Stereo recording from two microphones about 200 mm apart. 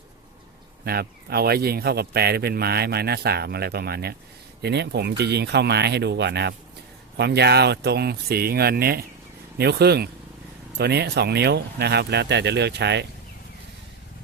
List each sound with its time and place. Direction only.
0.9 s a man's voice: 50° right (ahead or behind)